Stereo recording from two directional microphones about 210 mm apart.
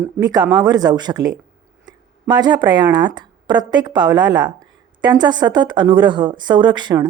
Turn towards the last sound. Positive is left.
turn(degrees=-20)  # may be behind; listen again after turning